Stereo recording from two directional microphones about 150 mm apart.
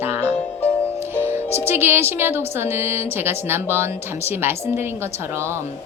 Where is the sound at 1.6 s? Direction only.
15° right (ahead or behind).